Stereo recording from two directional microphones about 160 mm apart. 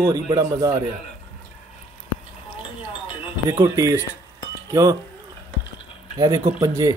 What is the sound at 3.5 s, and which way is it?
Speech, 20° right (ahead or behind).